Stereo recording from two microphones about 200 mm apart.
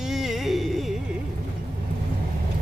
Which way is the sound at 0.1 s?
Centre (ahead or behind).